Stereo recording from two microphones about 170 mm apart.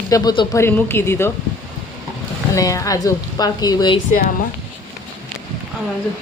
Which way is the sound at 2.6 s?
20° left (ahead or behind).